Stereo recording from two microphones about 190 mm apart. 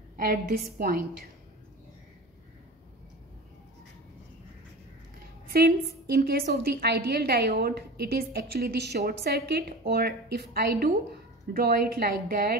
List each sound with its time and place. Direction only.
0.2 s a woman's voice: 50° right (ahead or behind)
5.5 s a woman's voice: 55° right (ahead or behind)